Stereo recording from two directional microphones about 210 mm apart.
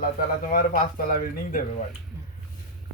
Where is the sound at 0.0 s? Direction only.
45° left (ahead or behind).